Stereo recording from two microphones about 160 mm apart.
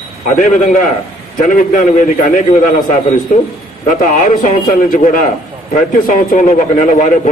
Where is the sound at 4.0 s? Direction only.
55° left (ahead or behind).